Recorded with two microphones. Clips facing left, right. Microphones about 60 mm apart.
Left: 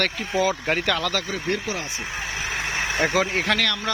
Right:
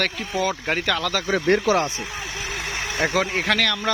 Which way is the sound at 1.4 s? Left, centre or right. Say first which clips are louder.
Right 8 dB; right.